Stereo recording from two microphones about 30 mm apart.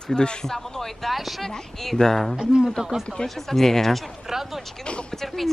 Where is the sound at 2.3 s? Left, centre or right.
Right.